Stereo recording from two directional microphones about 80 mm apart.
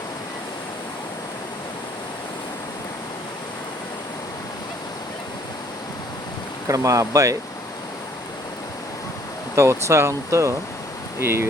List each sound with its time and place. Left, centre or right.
6.7 s speech: right
9.6 s speech: right